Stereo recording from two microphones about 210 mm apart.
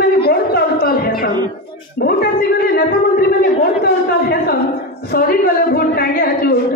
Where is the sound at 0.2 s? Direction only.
45° left (ahead or behind).